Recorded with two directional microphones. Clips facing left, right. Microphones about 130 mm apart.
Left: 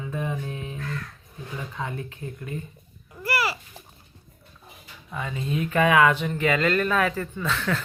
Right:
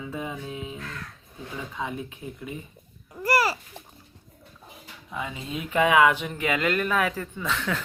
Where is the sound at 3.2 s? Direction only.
40° right (ahead or behind).